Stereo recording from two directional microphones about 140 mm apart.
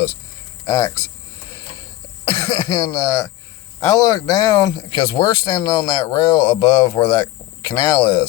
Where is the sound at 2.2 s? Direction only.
25° left (ahead or behind).